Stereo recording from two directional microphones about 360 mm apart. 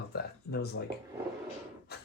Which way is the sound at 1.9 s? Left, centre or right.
Left.